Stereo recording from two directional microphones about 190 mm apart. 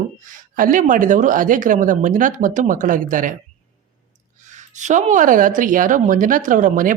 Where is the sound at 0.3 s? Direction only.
45° right (ahead or behind).